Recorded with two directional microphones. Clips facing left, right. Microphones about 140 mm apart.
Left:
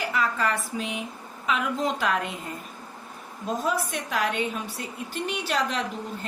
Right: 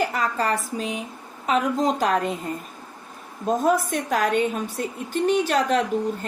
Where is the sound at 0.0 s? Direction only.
40° right (ahead or behind).